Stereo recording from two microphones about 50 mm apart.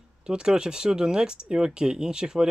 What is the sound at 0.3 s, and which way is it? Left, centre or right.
Speech, centre.